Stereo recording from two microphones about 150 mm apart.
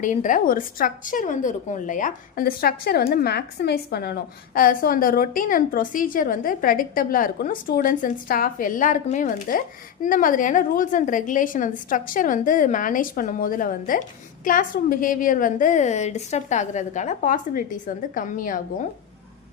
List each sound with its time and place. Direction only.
0.0 s a woman's voice: 60° left (ahead or behind)